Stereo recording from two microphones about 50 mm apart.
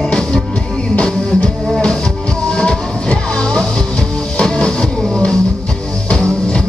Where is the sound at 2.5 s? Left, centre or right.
Left.